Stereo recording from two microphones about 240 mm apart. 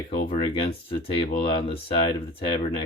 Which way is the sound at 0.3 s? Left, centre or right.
Left.